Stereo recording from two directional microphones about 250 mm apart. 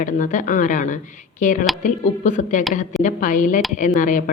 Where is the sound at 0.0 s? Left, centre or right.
Left.